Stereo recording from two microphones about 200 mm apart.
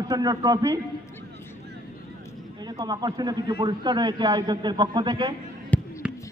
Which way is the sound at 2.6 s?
20° right (ahead or behind).